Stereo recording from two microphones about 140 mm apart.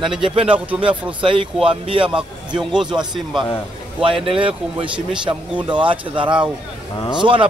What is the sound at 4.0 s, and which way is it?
A man's voice, 40° right (ahead or behind).